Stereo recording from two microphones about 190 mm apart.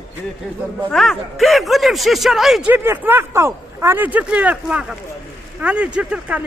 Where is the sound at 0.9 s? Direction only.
Centre (ahead or behind).